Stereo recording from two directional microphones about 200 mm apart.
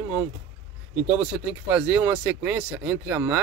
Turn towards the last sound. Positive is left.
turn(degrees=-10)  # may be behind; listen again after turning